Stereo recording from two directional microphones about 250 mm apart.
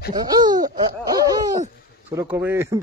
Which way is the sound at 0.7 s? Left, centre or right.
Centre.